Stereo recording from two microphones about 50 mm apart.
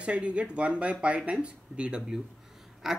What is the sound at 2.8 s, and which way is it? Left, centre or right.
Speech, centre.